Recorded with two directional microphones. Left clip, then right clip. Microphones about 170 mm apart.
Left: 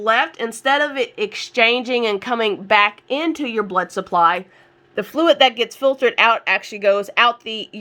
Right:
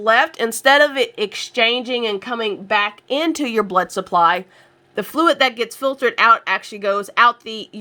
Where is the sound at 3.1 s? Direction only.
20° right (ahead or behind).